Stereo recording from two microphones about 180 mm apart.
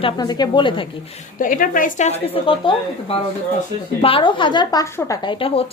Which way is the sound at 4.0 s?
30° left (ahead or behind).